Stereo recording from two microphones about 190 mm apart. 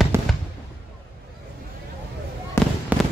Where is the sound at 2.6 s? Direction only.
15° left (ahead or behind).